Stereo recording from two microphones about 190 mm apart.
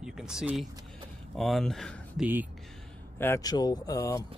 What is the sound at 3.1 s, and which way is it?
Speech, 10° left (ahead or behind).